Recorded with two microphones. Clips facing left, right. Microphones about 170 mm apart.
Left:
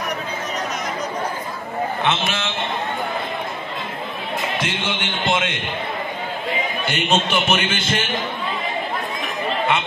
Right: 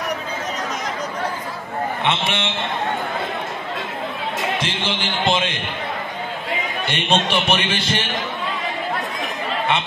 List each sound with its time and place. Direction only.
2.2 s a man's voice: 30° right (ahead or behind)
4.6 s a man's voice: 30° right (ahead or behind)
6.9 s a man's voice: 30° right (ahead or behind)